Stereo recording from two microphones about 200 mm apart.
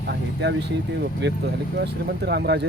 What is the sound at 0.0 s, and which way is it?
Speech, 60° right (ahead or behind).